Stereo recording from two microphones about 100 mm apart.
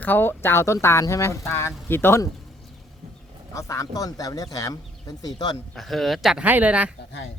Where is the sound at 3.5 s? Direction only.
30° left (ahead or behind).